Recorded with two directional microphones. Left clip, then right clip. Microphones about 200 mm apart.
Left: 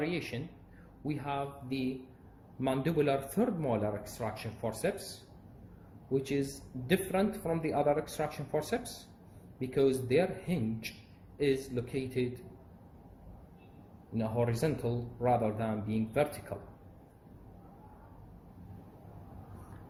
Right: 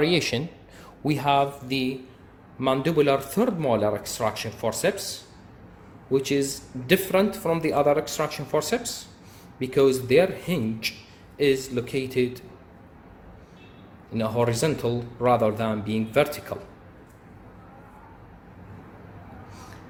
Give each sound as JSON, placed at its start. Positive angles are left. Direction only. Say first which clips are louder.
{"t": 0.0, "sound": "speech", "louder": "right 13 dB", "side_deg": -35}
{"t": 2.6, "sound": "speech", "louder": "right 9 dB", "side_deg": -10}
{"t": 6.1, "sound": "speech", "louder": "right 9 dB", "side_deg": -15}
{"t": 14.1, "sound": "speech", "louder": "right 9 dB", "side_deg": -15}